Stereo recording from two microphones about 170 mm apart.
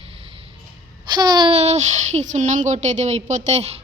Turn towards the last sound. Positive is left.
turn(degrees=-40)  # may be behind; listen again after turning